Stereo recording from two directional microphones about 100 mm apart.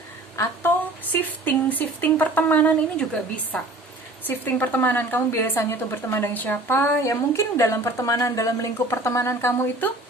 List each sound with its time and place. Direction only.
1.1 s speech: 20° left (ahead or behind)